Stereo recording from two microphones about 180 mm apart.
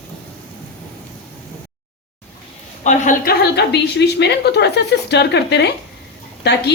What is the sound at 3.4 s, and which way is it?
A woman's voice, 65° left (ahead or behind).